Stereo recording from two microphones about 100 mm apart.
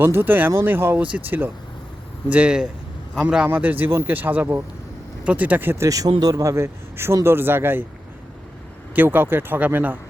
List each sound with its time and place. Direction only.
0.0 s a man's voice: 20° right (ahead or behind)
5.8 s speech: 35° right (ahead or behind)
9.0 s speech: 20° right (ahead or behind)